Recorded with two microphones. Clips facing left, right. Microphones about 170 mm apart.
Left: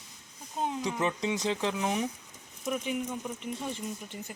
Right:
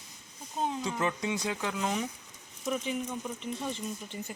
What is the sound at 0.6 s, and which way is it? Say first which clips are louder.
Speech: left 1 dB; 10° left (ahead or behind).